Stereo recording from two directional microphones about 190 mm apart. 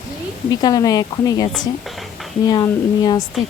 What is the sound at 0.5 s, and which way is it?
Speech, 20° left (ahead or behind).